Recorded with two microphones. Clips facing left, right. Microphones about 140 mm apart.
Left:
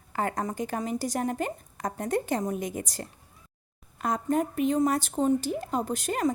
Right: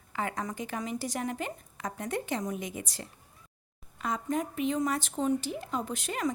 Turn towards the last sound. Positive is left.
turn(degrees=40)  # may be behind; listen again after turning